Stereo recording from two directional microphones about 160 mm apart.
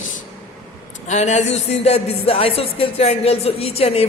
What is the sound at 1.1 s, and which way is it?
Speech, 45° left (ahead or behind).